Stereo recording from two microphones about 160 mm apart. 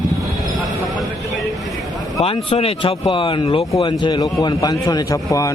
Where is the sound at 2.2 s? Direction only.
35° left (ahead or behind).